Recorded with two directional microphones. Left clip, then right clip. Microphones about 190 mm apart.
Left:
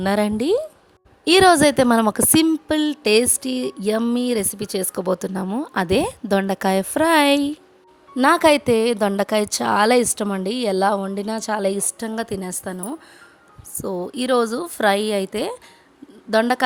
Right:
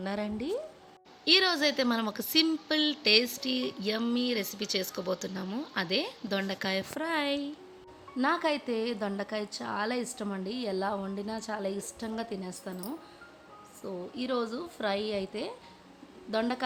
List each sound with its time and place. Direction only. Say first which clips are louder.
0.0 s a woman's voice: left 15 dB; 55° left (ahead or behind)
1.2 s a woman's voice: left 12 dB; 65° left (ahead or behind)